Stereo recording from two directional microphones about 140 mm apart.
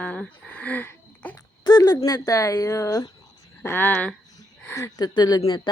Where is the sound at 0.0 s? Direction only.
10° left (ahead or behind).